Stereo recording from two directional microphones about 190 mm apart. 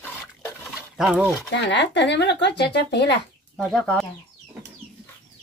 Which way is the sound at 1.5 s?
65° left (ahead or behind).